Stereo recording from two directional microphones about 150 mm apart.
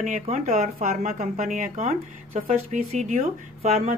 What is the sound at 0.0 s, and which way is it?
Speech, 55° right (ahead or behind).